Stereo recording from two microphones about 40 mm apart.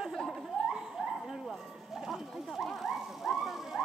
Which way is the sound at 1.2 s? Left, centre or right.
Centre.